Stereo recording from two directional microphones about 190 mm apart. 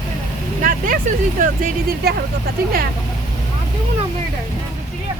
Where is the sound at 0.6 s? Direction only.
45° right (ahead or behind).